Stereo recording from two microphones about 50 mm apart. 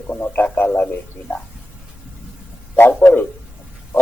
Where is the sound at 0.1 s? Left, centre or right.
Left.